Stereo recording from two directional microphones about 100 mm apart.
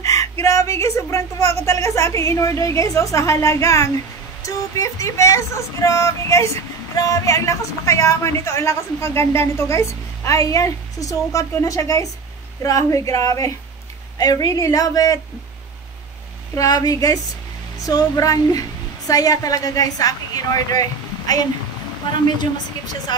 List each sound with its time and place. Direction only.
0.0 s female singing: 35° left (ahead or behind)
16.5 s female singing: 40° left (ahead or behind)
17.7 s a woman's voice: 35° left (ahead or behind)